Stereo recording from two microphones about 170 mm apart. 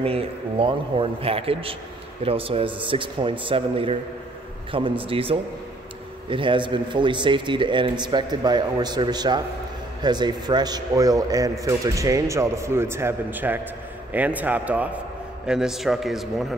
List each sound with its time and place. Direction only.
0.0 s a man's voice: 35° right (ahead or behind); by 16.4 s centre (ahead or behind)